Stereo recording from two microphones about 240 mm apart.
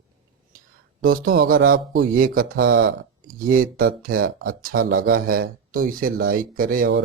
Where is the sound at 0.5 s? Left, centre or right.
Right.